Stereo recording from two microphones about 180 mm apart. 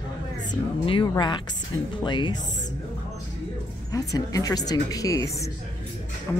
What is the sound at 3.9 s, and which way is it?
Speech, 20° left (ahead or behind).